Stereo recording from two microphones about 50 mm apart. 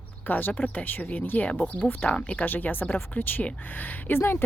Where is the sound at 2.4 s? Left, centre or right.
Left.